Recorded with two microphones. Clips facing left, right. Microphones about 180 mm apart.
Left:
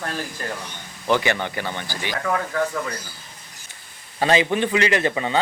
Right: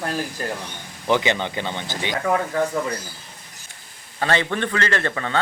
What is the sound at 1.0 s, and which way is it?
Speech, 20° right (ahead or behind).